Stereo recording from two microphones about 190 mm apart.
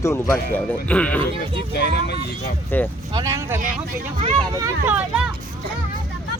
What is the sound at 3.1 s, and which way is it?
Speech, 20° right (ahead or behind).